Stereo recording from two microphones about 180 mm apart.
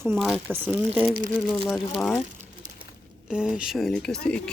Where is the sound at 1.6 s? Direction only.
Centre (ahead or behind).